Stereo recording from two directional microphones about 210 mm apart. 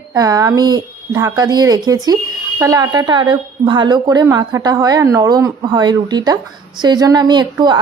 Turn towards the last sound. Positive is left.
turn(degrees=-20)  # may be behind; listen again after turning